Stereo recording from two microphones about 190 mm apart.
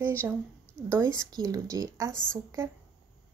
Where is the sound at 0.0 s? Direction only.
15° right (ahead or behind).